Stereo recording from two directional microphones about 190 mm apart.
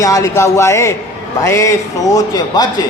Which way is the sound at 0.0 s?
15° left (ahead or behind).